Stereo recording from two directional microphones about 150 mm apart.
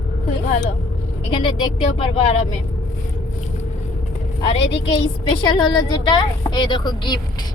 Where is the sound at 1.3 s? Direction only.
35° left (ahead or behind).